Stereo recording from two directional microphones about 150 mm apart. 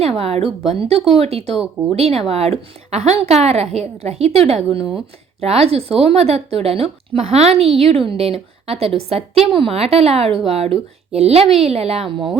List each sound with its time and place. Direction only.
0.0 s speech: 45° right (ahead or behind)